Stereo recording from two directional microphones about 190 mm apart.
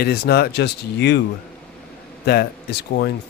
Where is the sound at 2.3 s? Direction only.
60° left (ahead or behind).